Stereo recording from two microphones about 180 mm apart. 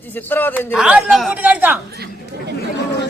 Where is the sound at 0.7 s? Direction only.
5° right (ahead or behind).